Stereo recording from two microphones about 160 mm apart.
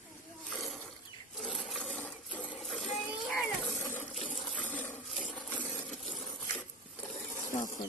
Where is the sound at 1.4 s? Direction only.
Centre (ahead or behind).